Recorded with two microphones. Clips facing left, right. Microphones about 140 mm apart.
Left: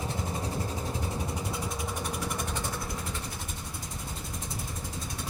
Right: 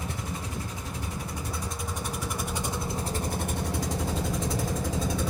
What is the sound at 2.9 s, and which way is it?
Vehicle, 40° right (ahead or behind).